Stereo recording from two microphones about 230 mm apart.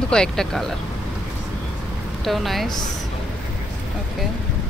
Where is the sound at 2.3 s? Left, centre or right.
Centre.